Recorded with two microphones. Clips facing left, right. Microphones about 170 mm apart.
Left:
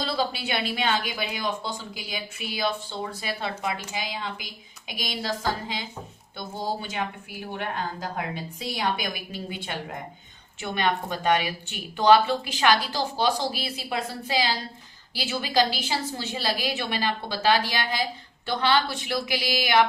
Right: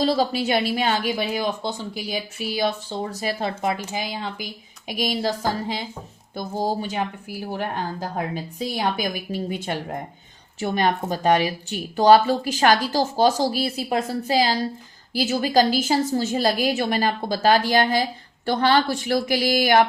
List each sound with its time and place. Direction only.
0.0 s speech: 40° right (ahead or behind)
6.9 s speech: 40° right (ahead or behind)